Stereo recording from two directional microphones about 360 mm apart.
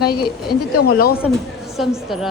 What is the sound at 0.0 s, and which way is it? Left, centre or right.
Speech, left.